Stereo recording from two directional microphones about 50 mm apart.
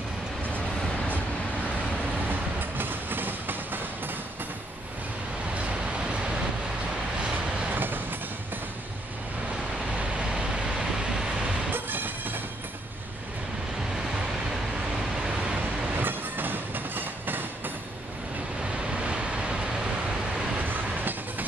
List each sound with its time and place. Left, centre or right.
2.8 s train: right
5.5 s vehicle: right
7.7 s train: right
9.9 s vehicle: right
11.7 s smash: right
16.0 s train: right
18.8 s vehicle: centre
20.5 s train: right